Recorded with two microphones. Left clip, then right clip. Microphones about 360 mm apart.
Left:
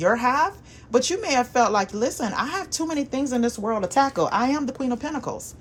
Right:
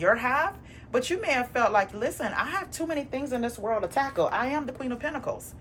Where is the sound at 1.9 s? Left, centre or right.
Centre.